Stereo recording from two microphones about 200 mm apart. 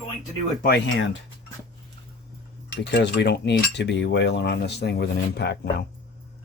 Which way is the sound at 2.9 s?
60° left (ahead or behind).